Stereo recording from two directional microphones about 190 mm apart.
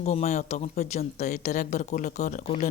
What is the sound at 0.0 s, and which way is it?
Speech, 35° left (ahead or behind).